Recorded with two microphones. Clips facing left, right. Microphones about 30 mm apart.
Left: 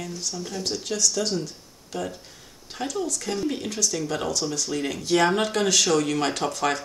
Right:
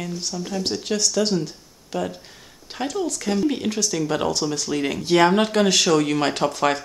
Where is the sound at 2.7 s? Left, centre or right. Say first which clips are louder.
Right 3 dB; right.